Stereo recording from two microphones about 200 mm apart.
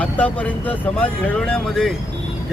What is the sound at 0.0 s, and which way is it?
Speech, 5° left (ahead or behind).